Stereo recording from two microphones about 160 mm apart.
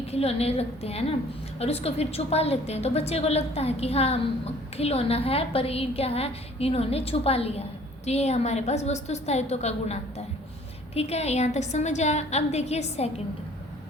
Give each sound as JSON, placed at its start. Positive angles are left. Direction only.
{"t": 0.1, "sound": "a woman's voice", "side_deg": 40}